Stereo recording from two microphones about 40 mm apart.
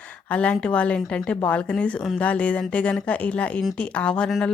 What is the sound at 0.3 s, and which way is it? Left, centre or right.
Speech, left.